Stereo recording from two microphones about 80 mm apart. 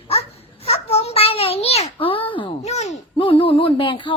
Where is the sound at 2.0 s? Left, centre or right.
Left.